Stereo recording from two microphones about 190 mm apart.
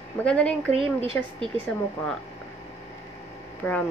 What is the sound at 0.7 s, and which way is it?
Speech, 30° right (ahead or behind).